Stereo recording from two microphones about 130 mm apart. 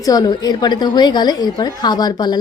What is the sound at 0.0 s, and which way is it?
A woman's voice, 30° left (ahead or behind).